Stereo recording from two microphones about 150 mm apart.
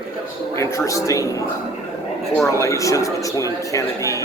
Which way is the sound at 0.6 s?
20° left (ahead or behind).